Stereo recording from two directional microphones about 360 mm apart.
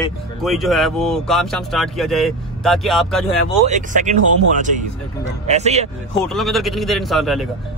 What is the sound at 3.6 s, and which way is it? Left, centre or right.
Speech, centre.